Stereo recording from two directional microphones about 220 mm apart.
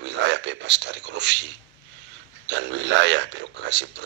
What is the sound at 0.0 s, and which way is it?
A man's voice, 50° right (ahead or behind).